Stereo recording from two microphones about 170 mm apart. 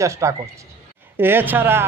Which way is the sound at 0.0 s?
15° right (ahead or behind).